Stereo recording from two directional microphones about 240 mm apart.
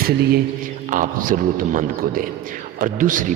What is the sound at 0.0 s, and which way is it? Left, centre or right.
A man's voice, right.